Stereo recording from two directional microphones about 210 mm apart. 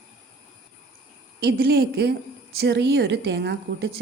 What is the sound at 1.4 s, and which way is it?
A woman's voice, 50° right (ahead or behind).